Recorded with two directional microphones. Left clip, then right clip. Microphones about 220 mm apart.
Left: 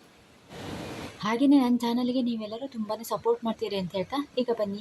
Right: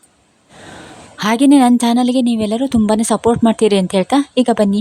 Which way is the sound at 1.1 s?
50° right (ahead or behind).